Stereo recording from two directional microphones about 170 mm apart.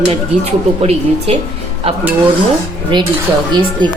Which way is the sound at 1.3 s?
35° right (ahead or behind).